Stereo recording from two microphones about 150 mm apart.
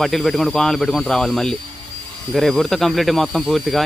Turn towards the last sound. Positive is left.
turn(degrees=0)  # may be behind; listen again after turning